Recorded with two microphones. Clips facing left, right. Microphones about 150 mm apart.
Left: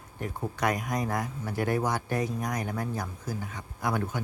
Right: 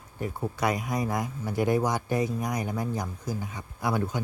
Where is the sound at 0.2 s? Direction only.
10° right (ahead or behind).